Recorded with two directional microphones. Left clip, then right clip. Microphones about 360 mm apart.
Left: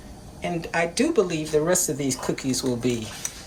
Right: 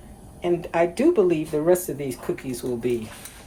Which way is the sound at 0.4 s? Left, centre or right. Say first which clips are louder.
Right 3 dB; centre.